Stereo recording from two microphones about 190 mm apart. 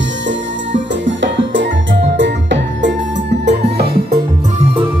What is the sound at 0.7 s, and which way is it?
Music, 75° right (ahead or behind).